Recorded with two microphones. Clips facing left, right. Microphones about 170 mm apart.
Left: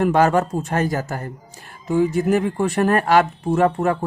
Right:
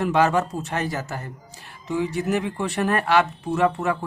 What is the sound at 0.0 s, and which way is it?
Speech, 50° left (ahead or behind).